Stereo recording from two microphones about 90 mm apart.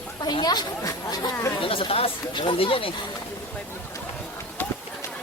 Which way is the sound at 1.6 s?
85° left.